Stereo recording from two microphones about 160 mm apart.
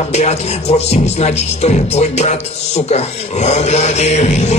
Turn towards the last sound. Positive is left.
turn(degrees=45)  # may be behind; listen again after turning